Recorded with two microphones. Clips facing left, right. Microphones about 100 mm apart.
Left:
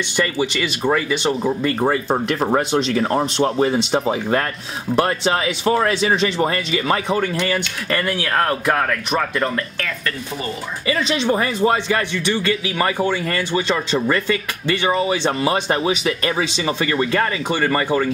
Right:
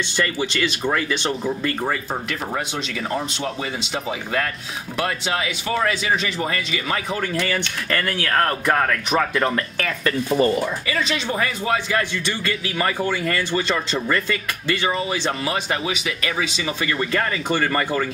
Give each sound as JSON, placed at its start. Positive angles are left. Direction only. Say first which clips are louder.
{"t": 0.1, "sound": "a man's voice", "louder": "left 5 dB", "side_deg": 15}
{"t": 1.8, "sound": "speech", "louder": "left 6 dB", "side_deg": 30}
{"t": 7.2, "sound": "a man's voice", "louder": "left 3 dB", "side_deg": 20}
{"t": 11.3, "sound": "speech", "louder": "left 3 dB", "side_deg": 30}
{"t": 12.0, "sound": "a man's voice", "louder": "left 4 dB", "side_deg": 15}
{"t": 14.9, "sound": "speech", "louder": "left 7 dB", "side_deg": 35}